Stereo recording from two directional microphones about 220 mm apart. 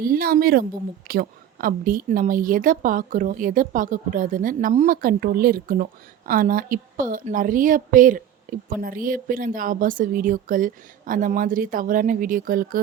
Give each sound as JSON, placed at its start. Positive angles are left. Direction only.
{"t": 0.0, "sound": "a woman's voice", "side_deg": -40}